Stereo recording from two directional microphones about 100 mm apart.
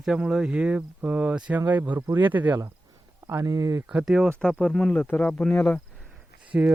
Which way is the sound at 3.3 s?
35° right (ahead or behind).